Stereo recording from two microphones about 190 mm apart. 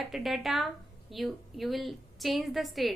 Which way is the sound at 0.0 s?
Centre (ahead or behind).